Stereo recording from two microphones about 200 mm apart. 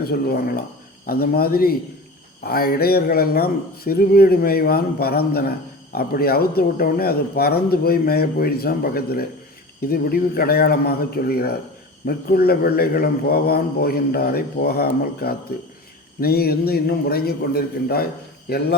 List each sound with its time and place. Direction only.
0.0 s a man's voice: 50° left (ahead or behind)